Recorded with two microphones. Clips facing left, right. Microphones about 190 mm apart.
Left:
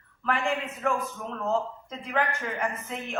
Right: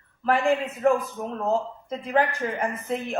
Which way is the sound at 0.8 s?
35° right (ahead or behind).